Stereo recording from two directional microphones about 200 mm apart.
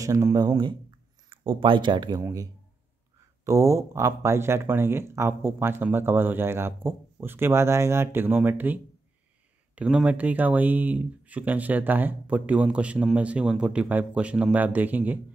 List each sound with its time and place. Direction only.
0.0 s speech: 15° right (ahead or behind)